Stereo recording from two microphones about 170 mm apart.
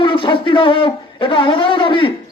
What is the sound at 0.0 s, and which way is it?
A man's voice, 30° left (ahead or behind).